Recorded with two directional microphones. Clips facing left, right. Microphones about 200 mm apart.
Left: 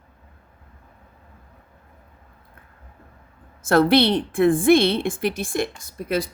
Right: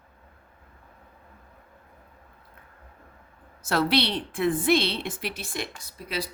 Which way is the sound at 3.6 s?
50° left (ahead or behind).